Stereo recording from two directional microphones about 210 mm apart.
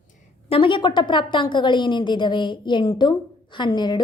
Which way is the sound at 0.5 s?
25° left (ahead or behind).